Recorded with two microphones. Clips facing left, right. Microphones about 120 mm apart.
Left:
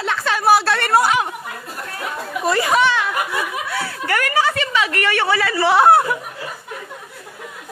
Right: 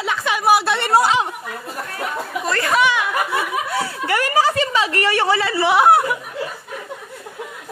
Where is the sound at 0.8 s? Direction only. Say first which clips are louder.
Even; 25° right (ahead or behind).